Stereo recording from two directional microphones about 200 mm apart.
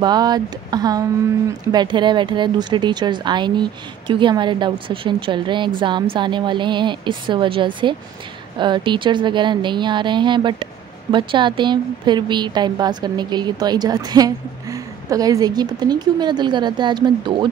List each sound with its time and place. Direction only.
0.0 s a woman's voice: 20° right (ahead or behind)